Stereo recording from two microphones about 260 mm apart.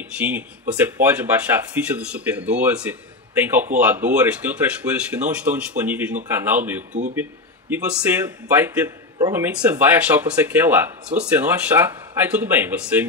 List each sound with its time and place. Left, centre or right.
0.2 s speech: centre
6.9 s speech: right
7.7 s speech: centre